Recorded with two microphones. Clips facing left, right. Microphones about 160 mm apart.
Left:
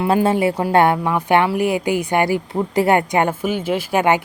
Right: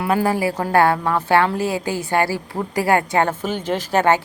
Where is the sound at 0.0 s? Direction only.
25° left (ahead or behind).